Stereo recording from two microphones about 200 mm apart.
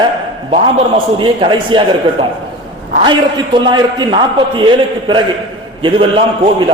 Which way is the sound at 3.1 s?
20° right (ahead or behind).